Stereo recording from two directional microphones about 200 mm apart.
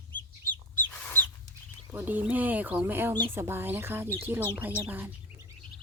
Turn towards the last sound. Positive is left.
turn(degrees=-10)  # may be behind; listen again after turning